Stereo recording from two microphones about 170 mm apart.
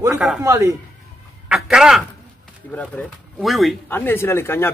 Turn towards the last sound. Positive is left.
turn(degrees=15)  # may be behind; listen again after turning